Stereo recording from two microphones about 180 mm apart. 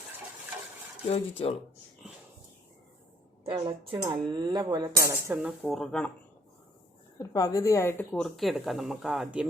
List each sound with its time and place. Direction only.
1.1 s speech: 35° left (ahead or behind)
3.4 s a woman's voice: 30° right (ahead or behind)
5.0 s speech: 5° right (ahead or behind)
7.2 s speech: 20° left (ahead or behind); by 9.5 s 5° right (ahead or behind)